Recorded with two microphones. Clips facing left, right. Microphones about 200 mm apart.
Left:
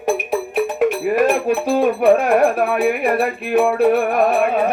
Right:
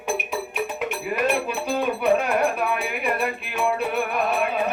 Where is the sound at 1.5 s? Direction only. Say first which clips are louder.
Left 8 dB; 50° left (ahead or behind).